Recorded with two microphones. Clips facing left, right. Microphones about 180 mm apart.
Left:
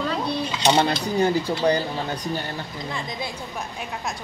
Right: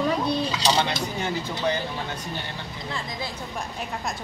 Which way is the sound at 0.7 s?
40° left (ahead or behind).